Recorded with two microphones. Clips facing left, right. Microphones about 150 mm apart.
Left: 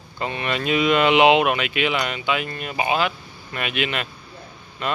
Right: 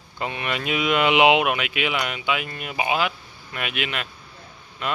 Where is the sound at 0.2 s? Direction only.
10° right (ahead or behind).